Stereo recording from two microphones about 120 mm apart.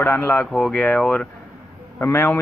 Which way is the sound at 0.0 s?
20° left (ahead or behind).